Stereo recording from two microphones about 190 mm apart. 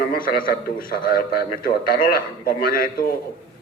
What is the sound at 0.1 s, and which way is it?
A man's voice, 50° left (ahead or behind).